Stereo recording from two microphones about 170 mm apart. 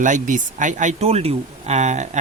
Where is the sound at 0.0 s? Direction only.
50° right (ahead or behind).